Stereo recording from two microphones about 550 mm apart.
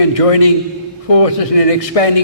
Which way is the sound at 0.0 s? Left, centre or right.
Left.